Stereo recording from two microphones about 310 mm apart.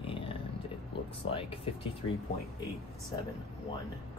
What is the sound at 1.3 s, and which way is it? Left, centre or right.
Speech, centre.